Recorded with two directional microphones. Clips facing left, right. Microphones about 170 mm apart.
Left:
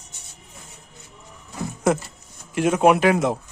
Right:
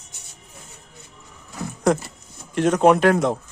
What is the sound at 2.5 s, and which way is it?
Speech, 10° left (ahead or behind).